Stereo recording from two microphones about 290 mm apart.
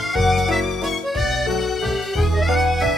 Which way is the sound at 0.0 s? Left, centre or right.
Centre.